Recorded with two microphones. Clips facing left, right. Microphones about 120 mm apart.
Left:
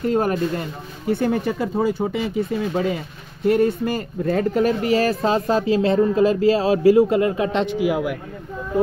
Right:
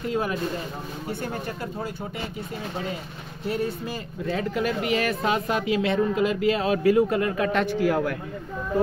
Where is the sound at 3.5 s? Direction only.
60° left (ahead or behind); by 7.7 s 25° left (ahead or behind).